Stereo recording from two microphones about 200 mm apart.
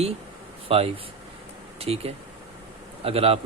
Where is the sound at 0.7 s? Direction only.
30° right (ahead or behind).